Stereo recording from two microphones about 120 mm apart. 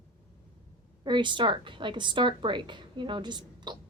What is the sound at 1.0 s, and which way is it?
A woman's voice, 40° right (ahead or behind).